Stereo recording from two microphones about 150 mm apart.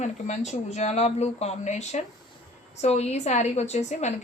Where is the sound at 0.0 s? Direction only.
50° left (ahead or behind).